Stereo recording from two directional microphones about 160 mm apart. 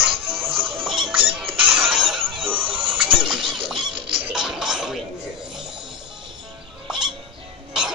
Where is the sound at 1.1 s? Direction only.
35° right (ahead or behind).